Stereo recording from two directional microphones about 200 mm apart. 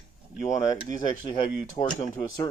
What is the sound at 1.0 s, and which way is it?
Speech, 20° left (ahead or behind).